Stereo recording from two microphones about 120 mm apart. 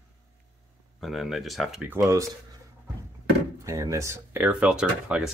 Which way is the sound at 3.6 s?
25° right (ahead or behind).